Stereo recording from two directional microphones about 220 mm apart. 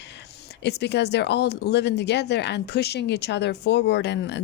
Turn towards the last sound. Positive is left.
turn(degrees=50)  # may be behind; listen again after turning